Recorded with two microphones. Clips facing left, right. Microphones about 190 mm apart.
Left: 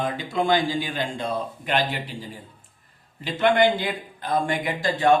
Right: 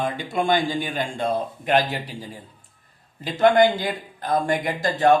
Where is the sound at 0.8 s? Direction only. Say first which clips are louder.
Right 3 dB; 50° right (ahead or behind).